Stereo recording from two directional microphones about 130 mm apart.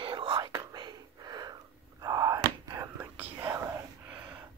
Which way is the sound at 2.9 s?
15° right (ahead or behind).